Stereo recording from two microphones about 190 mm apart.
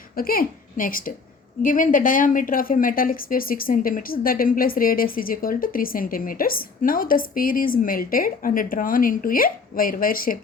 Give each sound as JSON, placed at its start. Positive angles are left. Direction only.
{"t": 0.2, "sound": "a woman's voice", "side_deg": 50}